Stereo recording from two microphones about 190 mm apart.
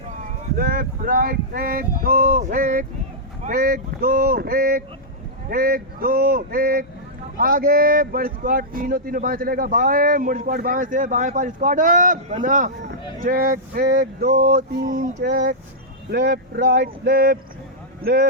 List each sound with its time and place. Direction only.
0.5 s speech: 50° right (ahead or behind)